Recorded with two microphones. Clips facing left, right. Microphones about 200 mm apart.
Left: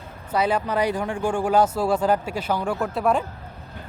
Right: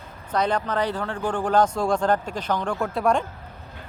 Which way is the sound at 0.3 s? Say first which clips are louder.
Left 1 dB; 5° left (ahead or behind).